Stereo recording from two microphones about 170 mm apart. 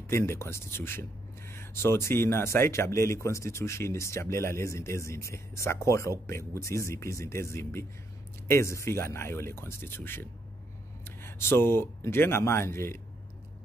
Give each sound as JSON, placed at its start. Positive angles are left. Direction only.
{"t": 0.1, "sound": "a man's voice", "side_deg": 15}